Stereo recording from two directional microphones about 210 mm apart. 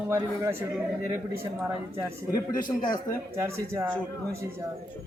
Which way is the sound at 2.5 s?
40° left (ahead or behind).